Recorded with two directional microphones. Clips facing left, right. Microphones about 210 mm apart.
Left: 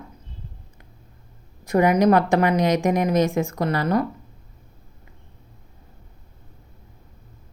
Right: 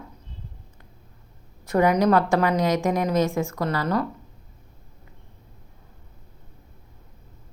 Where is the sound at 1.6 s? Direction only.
10° left (ahead or behind).